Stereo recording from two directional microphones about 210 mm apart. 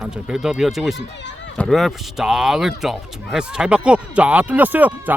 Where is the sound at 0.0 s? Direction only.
5° right (ahead or behind).